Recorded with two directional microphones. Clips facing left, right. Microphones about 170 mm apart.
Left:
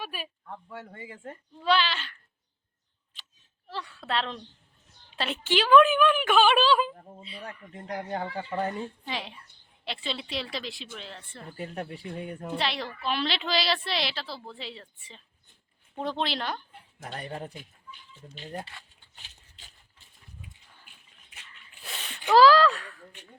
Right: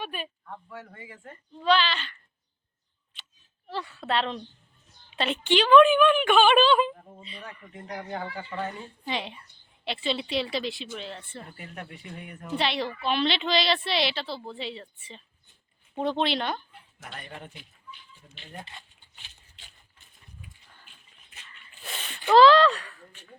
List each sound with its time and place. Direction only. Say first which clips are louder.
0.0 s speech: right 3 dB; 5° left (ahead or behind)
0.7 s speech: left 1 dB; 25° left (ahead or behind)
1.6 s speech: right 2 dB; 10° left (ahead or behind)
3.7 s a woman's voice: right 3 dB; centre (ahead or behind)
7.9 s speech: left 2 dB; 40° left (ahead or behind)
9.0 s a woman's voice: right 3 dB; centre (ahead or behind)
11.5 s speech: left 6 dB; 35° left (ahead or behind)
12.5 s a woman's voice: right 5 dB; centre (ahead or behind)
17.1 s speech: left 5 dB; 35° left (ahead or behind)
18.6 s speech: even; 20° right (ahead or behind)
19.5 s a sound: even; 40° left (ahead or behind)
20.7 s dog: right 1 dB; 10° left (ahead or behind)
21.8 s a sound: right 2 dB; centre (ahead or behind)
22.3 s a woman's voice: right 2 dB; 5° left (ahead or behind)